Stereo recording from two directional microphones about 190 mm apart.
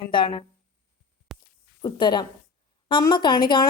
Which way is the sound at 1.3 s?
Centre (ahead or behind).